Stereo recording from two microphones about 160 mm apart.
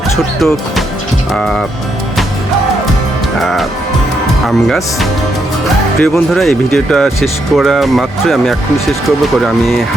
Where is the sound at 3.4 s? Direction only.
Centre (ahead or behind).